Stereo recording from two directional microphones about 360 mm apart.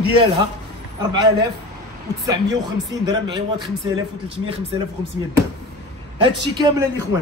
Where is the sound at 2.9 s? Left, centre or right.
Centre.